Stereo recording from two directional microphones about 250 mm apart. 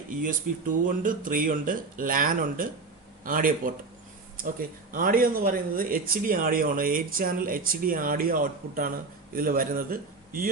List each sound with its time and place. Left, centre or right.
0.1 s speech: right
4.9 s a man's voice: right